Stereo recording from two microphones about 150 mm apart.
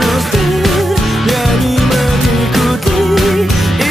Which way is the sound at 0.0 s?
Centre (ahead or behind).